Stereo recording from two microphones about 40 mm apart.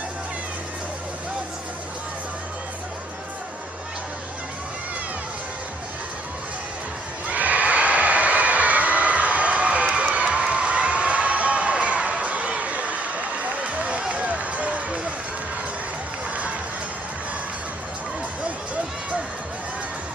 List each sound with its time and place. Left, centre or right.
7.2 s neigh: right
9.9 s crowd: right
13.7 s run: right